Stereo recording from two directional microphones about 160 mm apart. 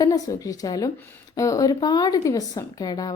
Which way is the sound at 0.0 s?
20° left (ahead or behind).